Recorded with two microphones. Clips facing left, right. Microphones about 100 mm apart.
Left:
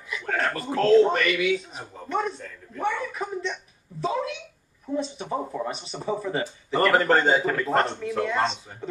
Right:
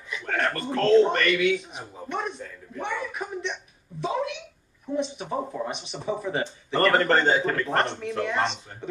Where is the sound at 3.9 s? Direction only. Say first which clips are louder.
Left 1 dB; 35° left (ahead or behind).